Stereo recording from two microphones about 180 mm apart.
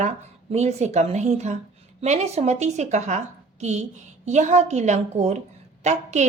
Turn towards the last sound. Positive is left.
turn(degrees=-40)  # may be behind; listen again after turning